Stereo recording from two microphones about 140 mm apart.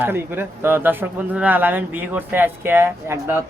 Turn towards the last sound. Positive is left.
turn(degrees=-15)  # may be behind; listen again after turning